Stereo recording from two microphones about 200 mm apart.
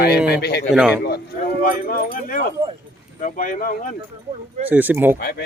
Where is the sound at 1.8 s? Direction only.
45° left (ahead or behind).